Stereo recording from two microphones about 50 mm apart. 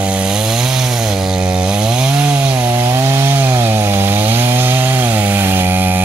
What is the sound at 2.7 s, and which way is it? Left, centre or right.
Wood, right.